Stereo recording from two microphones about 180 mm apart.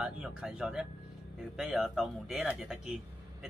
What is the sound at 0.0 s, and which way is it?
Speech, 5° right (ahead or behind).